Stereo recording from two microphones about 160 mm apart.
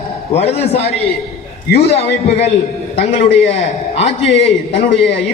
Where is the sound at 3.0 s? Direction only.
40° left (ahead or behind).